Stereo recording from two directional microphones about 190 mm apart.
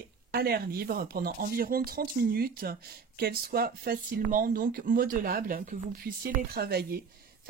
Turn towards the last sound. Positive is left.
turn(degrees=-55)  # may be behind; listen again after turning